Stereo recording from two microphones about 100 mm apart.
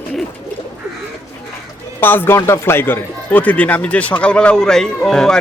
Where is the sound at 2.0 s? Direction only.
20° left (ahead or behind).